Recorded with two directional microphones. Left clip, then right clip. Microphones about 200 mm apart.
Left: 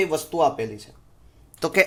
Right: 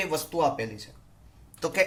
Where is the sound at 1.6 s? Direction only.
40° left (ahead or behind).